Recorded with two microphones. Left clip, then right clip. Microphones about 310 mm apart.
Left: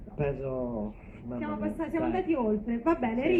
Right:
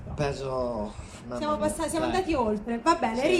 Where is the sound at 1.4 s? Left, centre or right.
Right.